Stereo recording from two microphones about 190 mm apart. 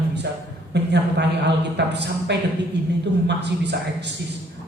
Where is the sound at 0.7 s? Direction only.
65° right (ahead or behind).